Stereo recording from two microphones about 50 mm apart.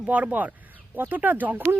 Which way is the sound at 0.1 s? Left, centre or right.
Right.